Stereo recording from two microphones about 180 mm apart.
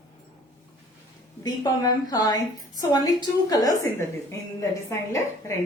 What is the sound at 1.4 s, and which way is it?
A woman's voice, 20° left (ahead or behind).